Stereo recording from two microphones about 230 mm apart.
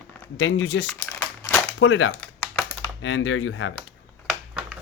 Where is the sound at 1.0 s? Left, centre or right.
Centre.